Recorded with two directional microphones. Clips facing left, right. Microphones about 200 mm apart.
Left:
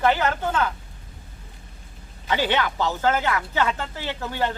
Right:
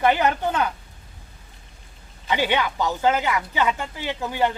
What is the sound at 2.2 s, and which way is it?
Speech, 15° right (ahead or behind).